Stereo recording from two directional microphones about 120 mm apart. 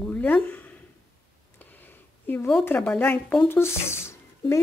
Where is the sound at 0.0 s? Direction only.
15° left (ahead or behind).